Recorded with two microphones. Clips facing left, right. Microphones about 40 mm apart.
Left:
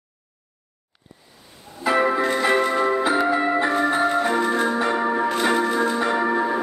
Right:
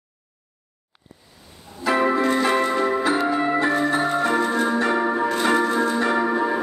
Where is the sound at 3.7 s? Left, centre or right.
Left.